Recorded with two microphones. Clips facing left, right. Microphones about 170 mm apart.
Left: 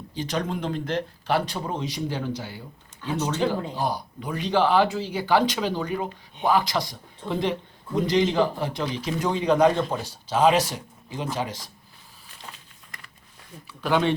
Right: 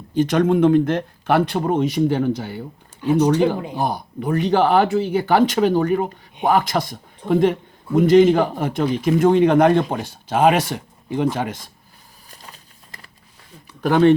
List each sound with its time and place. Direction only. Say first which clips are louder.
0.1 s speech: right 12 dB; 50° right (ahead or behind)
3.0 s speech: right 11 dB; 15° right (ahead or behind)
3.8 s speech: right 4 dB; 55° right (ahead or behind)
13.7 s speech: right 9 dB; 50° right (ahead or behind)